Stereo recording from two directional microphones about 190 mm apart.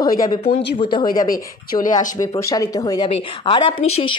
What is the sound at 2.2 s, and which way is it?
A woman's voice, 15° left (ahead or behind).